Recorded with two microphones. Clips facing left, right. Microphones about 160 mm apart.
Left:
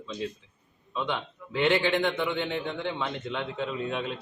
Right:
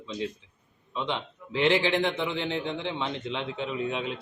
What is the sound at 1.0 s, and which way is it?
A man's voice, 20° right (ahead or behind).